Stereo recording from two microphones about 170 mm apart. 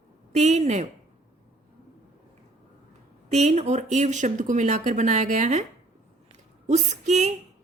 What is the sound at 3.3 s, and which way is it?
Speech, 40° right (ahead or behind).